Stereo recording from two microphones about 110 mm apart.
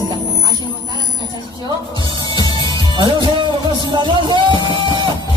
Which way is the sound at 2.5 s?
45° right (ahead or behind).